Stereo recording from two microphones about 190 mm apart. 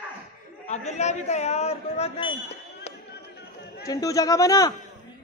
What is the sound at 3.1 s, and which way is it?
Chatter, 60° left (ahead or behind).